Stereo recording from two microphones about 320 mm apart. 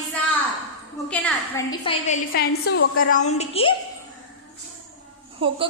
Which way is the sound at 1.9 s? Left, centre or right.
Left.